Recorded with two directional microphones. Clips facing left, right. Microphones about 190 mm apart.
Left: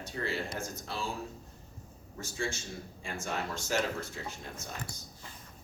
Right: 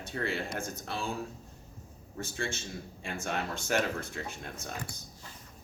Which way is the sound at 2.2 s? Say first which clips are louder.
Even; 60° right (ahead or behind).